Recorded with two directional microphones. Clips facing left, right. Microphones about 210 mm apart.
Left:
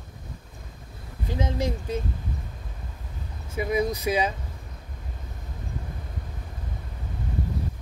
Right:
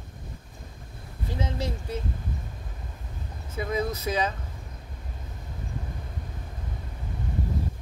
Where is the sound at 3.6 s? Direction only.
15° left (ahead or behind).